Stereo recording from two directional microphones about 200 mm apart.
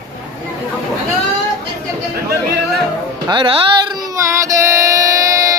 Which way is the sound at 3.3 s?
25° right (ahead or behind).